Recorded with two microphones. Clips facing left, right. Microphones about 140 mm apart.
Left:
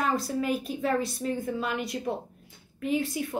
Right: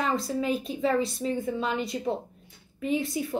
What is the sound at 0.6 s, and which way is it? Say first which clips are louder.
Speech: right 2 dB; 25° right (ahead or behind).